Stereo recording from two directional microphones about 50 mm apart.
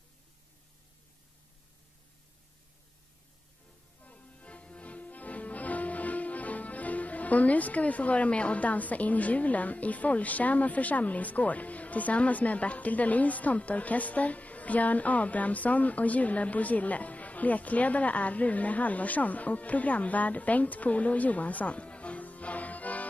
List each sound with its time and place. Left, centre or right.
4.0 s music: left